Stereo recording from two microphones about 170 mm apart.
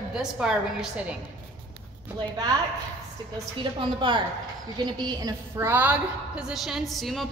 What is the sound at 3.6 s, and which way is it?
A woman's voice, 30° right (ahead or behind).